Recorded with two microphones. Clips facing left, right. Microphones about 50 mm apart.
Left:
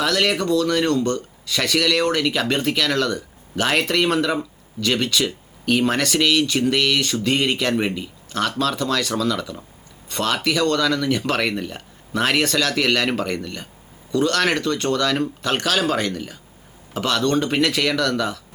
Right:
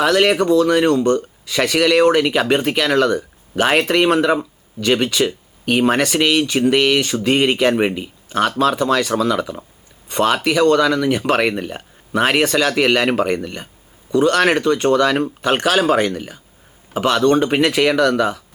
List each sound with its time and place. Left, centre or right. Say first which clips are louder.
0.0 s speech: right 6 dB; centre